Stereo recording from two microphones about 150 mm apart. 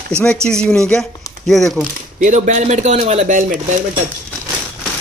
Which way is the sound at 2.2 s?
55° right (ahead or behind).